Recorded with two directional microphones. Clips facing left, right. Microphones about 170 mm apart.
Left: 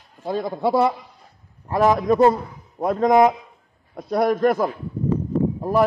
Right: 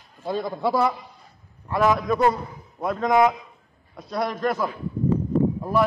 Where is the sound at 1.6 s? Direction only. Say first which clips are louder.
Left 3 dB; 40° left (ahead or behind).